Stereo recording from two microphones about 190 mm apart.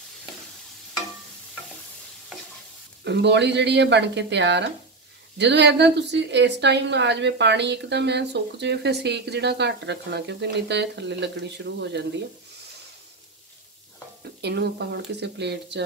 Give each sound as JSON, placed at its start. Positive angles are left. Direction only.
{"t": 3.0, "sound": "a woman's voice", "side_deg": -65}
{"t": 14.4, "sound": "a woman's voice", "side_deg": -60}